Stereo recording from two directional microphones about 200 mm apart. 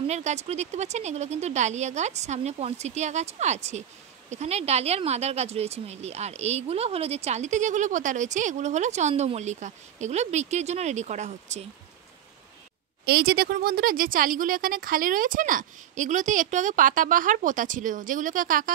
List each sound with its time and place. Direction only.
0.0 s speech: 35° right (ahead or behind)
13.0 s speech: 50° right (ahead or behind)